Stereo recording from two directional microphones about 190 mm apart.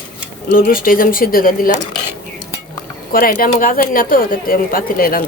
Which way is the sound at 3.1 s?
50° left (ahead or behind).